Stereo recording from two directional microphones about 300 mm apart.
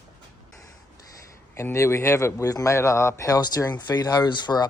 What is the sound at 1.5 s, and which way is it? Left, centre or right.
A man's voice, centre.